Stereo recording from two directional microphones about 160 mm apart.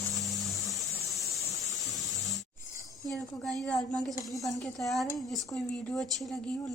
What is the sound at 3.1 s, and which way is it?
A woman's voice, 5° left (ahead or behind).